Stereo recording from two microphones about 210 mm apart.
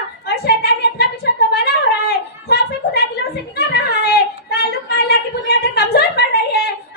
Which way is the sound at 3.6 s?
50° left (ahead or behind).